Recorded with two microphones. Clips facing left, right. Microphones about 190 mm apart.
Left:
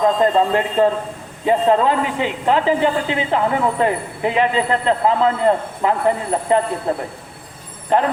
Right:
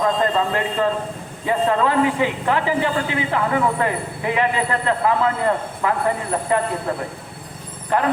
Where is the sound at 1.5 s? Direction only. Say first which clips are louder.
Left 4 dB; 20° left (ahead or behind).